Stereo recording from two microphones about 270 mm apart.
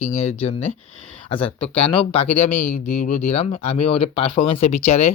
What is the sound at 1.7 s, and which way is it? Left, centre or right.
Speech, left.